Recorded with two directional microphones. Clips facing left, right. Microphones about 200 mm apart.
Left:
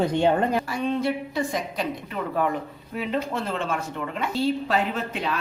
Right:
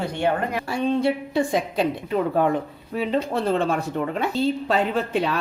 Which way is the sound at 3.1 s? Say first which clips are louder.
Right 5 dB; 35° right (ahead or behind).